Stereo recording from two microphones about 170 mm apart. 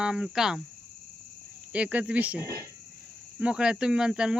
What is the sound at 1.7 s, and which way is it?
Cricket, 10° right (ahead or behind).